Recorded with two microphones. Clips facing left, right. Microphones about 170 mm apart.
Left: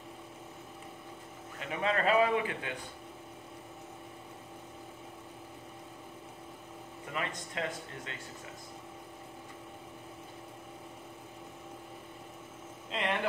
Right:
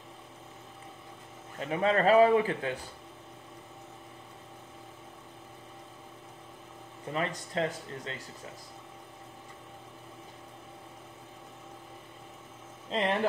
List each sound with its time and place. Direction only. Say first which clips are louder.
1.6 s speech: right 5 dB; 35° right (ahead or behind)
7.1 s speech: right 5 dB; 35° right (ahead or behind)
12.9 s speech: right 5 dB; 35° right (ahead or behind)